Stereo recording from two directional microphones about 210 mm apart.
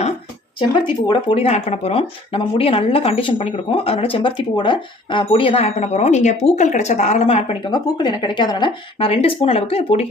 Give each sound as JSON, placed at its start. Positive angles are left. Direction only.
{"t": 0.6, "sound": "speech", "side_deg": 20}